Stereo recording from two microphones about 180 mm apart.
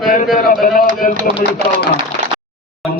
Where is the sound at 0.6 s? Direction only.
50° left (ahead or behind).